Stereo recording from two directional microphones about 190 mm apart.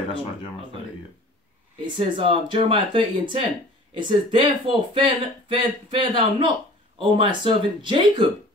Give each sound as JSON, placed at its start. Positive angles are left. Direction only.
{"t": 1.8, "sound": "speech", "side_deg": -25}